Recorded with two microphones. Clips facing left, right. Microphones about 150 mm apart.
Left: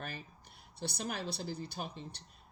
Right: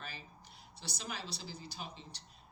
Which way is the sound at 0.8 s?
55° left (ahead or behind).